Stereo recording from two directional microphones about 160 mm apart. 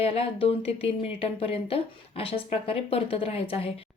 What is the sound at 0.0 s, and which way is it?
A woman's voice, 35° left (ahead or behind).